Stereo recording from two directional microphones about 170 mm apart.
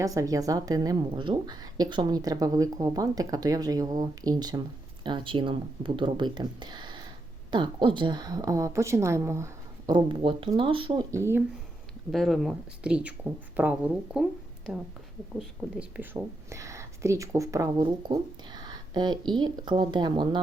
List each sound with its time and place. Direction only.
0.0 s speech: 20° right (ahead or behind)
11.1 s speech: 15° right (ahead or behind)
12.1 s a woman's voice: centre (ahead or behind); by 20.4 s 25° right (ahead or behind)